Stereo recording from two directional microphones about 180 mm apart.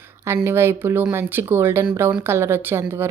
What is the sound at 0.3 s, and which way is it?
Speech, 15° right (ahead or behind).